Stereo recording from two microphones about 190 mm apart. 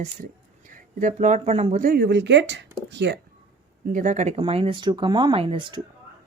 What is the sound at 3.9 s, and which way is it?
A woman's voice, 40° right (ahead or behind).